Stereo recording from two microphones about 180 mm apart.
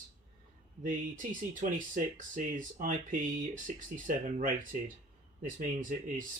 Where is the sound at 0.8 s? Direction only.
45° right (ahead or behind).